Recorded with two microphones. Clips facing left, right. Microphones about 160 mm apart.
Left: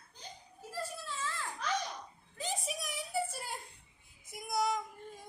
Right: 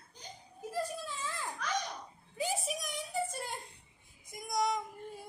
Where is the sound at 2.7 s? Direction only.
5° left (ahead or behind).